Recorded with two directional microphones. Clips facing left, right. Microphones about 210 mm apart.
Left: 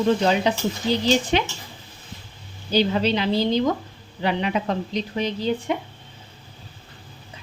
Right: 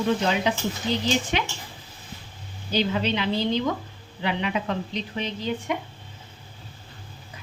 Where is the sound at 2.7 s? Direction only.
35° left (ahead or behind).